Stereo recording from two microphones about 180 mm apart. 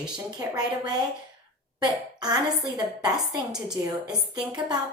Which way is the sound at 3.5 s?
5° right (ahead or behind).